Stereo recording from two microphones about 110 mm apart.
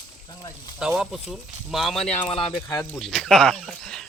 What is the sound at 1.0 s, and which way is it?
Speech, 5° right (ahead or behind).